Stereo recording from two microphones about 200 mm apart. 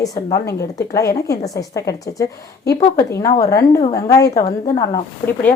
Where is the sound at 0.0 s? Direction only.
20° left (ahead or behind).